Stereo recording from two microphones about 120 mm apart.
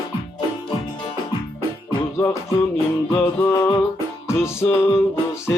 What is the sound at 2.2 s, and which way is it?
Music, 25° left (ahead or behind).